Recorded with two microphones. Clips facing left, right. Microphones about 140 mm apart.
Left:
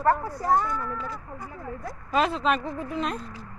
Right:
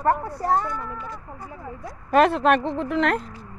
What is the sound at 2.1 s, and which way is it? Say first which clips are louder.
Speech: right 7 dB; 60° right (ahead or behind).